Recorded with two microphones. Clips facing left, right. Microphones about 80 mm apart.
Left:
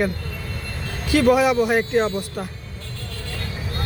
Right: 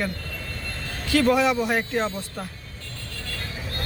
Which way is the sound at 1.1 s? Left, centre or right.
Centre.